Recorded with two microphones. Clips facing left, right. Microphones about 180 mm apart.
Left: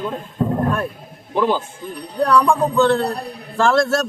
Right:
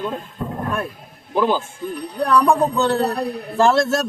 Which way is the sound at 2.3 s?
20° right (ahead or behind).